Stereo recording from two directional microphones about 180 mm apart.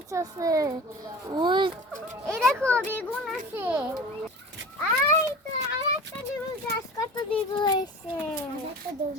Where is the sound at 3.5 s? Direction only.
10° right (ahead or behind).